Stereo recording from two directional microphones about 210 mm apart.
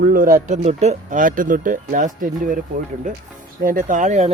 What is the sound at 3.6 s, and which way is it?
Speech, 40° right (ahead or behind).